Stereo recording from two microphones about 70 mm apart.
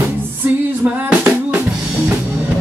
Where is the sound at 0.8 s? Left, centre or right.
Right.